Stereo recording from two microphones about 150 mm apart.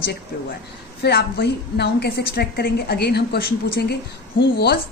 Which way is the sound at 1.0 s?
90° left.